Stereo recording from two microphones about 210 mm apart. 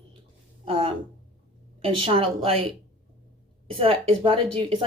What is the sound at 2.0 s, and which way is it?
Speech, 25° right (ahead or behind).